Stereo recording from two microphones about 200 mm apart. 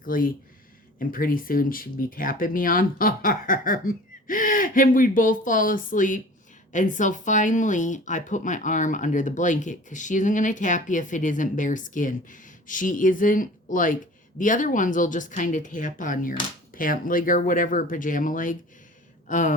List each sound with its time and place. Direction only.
0.0 s speech: 45° left (ahead or behind)